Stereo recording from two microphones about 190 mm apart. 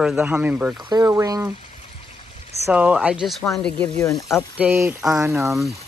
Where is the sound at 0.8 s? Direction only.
20° right (ahead or behind).